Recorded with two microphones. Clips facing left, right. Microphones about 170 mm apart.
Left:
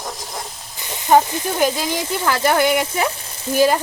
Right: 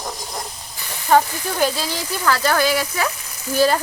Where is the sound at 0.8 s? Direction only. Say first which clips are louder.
Left 2 dB; 20° left (ahead or behind).